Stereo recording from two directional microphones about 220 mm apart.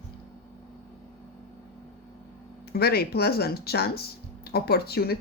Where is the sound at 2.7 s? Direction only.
45° left (ahead or behind).